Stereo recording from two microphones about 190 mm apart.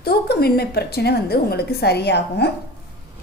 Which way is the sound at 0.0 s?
55° left (ahead or behind).